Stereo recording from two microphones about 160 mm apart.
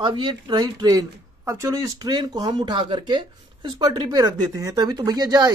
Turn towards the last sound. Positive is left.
turn(degrees=-25)  # may be behind; listen again after turning